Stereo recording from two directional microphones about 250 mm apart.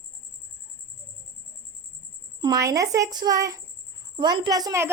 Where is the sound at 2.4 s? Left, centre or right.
Centre.